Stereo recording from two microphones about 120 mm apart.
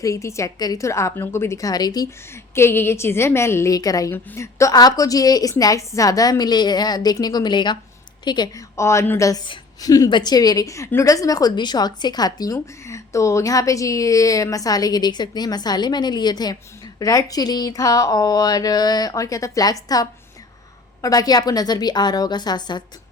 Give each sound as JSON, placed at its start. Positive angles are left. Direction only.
{"t": 0.0, "sound": "a woman's voice", "side_deg": 25}
{"t": 8.7, "sound": "a woman's voice", "side_deg": 25}